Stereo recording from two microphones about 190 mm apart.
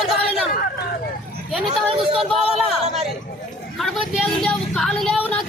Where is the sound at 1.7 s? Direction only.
30° right (ahead or behind).